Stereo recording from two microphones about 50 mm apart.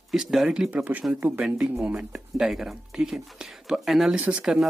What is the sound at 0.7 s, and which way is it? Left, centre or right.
Speech, right.